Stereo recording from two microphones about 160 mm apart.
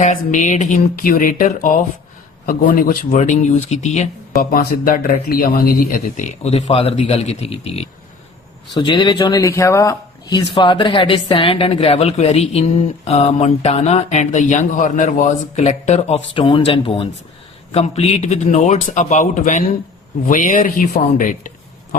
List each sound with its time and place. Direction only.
0.0 s speech: 50° left (ahead or behind)
4.5 s speech: 65° left (ahead or behind)